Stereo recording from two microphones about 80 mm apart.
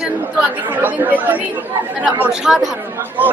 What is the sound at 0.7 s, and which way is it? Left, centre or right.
Speech, right.